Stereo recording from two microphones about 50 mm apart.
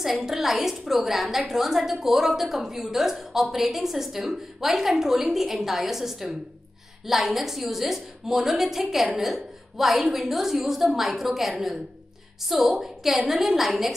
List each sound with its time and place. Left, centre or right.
0.0 s a woman's voice: centre